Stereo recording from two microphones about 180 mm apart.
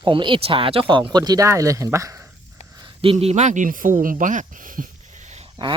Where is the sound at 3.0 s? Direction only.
35° right (ahead or behind).